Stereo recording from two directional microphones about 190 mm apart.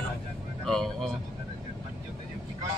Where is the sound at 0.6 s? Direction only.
Centre (ahead or behind).